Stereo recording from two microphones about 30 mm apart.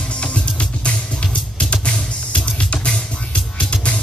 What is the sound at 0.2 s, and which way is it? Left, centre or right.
Music, left.